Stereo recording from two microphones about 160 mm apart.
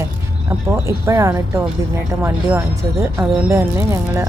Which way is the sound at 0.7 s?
15° right (ahead or behind).